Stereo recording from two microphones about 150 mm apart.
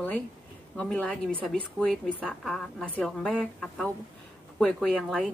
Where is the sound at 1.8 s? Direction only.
20° right (ahead or behind).